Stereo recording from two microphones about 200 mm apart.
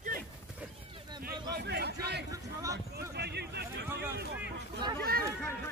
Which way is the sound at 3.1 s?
55° right (ahead or behind).